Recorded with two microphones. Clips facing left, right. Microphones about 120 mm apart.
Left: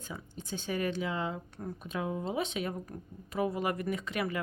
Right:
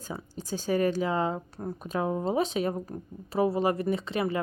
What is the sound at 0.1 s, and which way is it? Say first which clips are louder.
Speech: right 6 dB; 35° right (ahead or behind).